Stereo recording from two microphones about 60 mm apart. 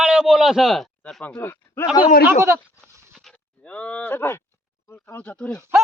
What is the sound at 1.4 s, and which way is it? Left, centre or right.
Speech, left.